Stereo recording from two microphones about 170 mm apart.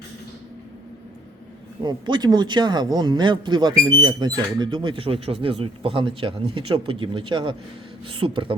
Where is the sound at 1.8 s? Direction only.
25° right (ahead or behind).